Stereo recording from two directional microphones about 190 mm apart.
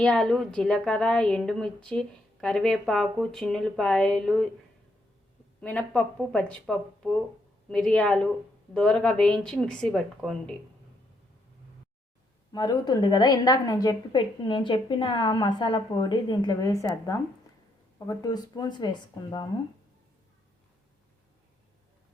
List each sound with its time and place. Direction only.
0.0 s a woman's voice: 5° left (ahead or behind)
5.5 s a woman's voice: 5° left (ahead or behind)
12.5 s a woman's voice: 20° left (ahead or behind)